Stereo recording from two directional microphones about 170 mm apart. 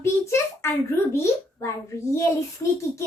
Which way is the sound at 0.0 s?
15° left (ahead or behind).